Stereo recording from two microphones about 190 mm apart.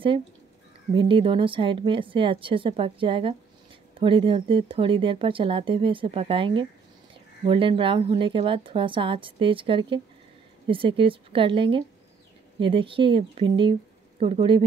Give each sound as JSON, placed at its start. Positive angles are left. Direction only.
{"t": 0.9, "sound": "speech", "side_deg": -25}